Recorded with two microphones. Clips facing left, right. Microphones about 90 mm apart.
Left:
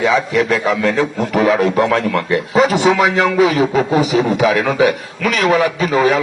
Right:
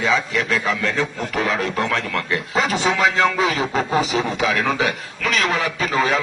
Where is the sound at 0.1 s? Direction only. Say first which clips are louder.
Left 6 dB; 35° left (ahead or behind).